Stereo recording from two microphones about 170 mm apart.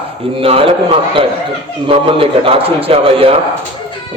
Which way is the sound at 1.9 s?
35° right (ahead or behind).